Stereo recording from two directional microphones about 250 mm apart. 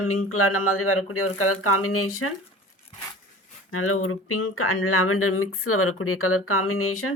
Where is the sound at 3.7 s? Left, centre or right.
Left.